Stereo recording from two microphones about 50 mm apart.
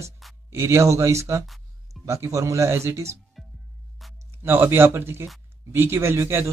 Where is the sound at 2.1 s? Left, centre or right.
Right.